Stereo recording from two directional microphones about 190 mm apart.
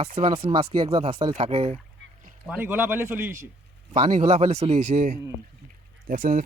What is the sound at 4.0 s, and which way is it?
Speech, 35° right (ahead or behind).